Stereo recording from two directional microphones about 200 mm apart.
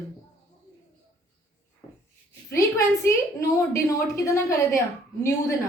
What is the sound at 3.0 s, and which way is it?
Speech, 15° left (ahead or behind).